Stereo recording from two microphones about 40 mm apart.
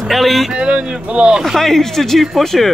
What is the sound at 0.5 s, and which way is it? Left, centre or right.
Speech, right.